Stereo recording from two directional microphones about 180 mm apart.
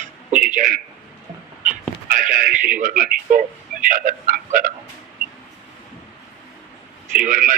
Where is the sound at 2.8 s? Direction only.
50° right (ahead or behind).